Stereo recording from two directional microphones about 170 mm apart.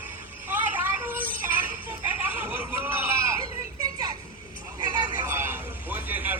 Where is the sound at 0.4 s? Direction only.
10° right (ahead or behind).